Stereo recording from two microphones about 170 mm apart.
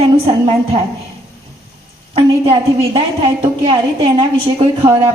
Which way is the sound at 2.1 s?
35° right (ahead or behind).